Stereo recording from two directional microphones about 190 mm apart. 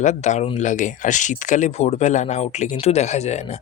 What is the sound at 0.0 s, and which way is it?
Speech, 40° left (ahead or behind).